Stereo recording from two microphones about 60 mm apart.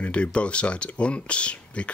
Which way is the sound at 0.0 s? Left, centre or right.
Centre.